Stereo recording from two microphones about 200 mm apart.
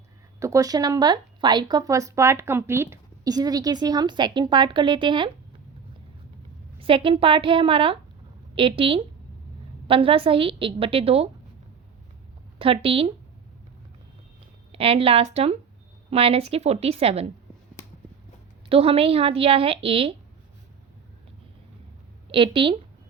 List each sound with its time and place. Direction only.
0.3 s speech: 15° right (ahead or behind)
6.7 s speech: 25° right (ahead or behind)
12.5 s speech: 25° right (ahead or behind)
14.7 s speech: 30° right (ahead or behind)
18.7 s speech: 30° right (ahead or behind)
22.3 s speech: 25° right (ahead or behind)